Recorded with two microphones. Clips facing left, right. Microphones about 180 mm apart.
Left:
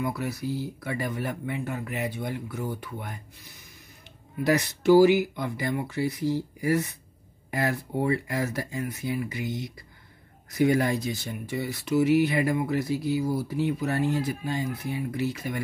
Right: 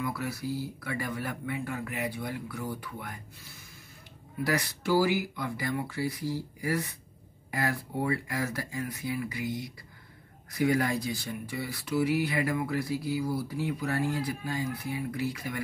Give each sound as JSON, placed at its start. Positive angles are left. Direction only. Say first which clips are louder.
{"t": 0.0, "sound": "speech", "louder": "left 3 dB", "side_deg": 20}